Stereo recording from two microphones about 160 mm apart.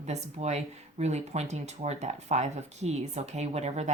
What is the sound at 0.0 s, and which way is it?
Speech, 45° right (ahead or behind).